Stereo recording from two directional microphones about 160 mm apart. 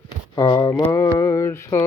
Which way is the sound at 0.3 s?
30° left (ahead or behind).